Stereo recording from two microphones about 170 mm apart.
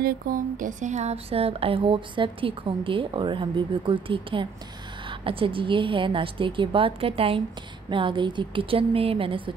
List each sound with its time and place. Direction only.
0.0 s speech: 55° right (ahead or behind); by 9.4 s 35° right (ahead or behind)